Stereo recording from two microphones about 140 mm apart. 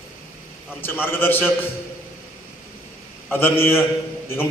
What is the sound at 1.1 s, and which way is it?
Speech, 15° left (ahead or behind).